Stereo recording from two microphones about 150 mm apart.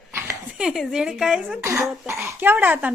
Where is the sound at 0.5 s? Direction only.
5° right (ahead or behind).